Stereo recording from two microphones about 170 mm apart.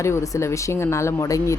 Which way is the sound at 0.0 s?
15° left (ahead or behind).